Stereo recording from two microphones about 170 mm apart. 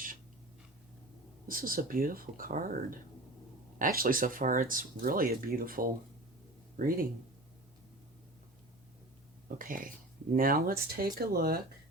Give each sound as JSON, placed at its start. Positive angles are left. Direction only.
{"t": 1.5, "sound": "speech", "side_deg": -55}
{"t": 9.6, "sound": "speech", "side_deg": -55}